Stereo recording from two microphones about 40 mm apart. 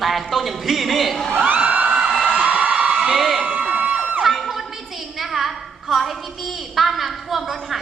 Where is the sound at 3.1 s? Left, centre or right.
Centre.